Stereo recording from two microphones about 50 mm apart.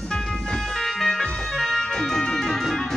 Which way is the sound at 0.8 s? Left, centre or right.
Centre.